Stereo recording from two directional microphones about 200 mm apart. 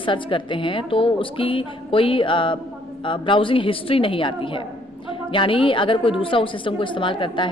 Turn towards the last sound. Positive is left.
turn(degrees=25)  # may be behind; listen again after turning